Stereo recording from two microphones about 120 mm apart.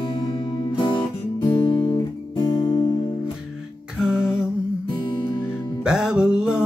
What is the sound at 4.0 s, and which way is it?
Music, 5° right (ahead or behind).